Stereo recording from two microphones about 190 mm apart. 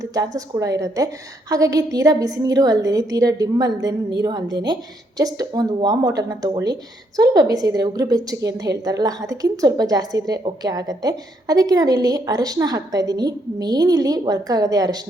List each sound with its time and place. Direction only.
0.0 s a woman's voice: 20° right (ahead or behind)